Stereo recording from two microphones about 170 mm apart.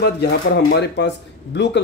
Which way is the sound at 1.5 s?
90° left.